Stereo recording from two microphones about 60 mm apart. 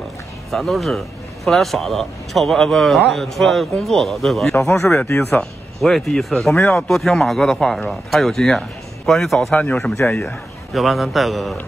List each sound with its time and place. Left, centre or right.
0.5 s a man's voice: centre
4.9 s speech: left
5.3 s a man's voice: centre